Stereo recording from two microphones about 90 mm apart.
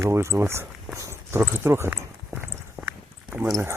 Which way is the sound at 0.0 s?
30° right (ahead or behind).